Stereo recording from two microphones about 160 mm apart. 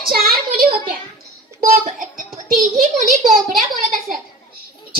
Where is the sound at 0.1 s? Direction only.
70° right (ahead or behind).